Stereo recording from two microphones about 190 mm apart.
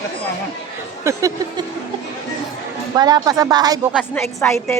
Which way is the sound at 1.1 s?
15° right (ahead or behind).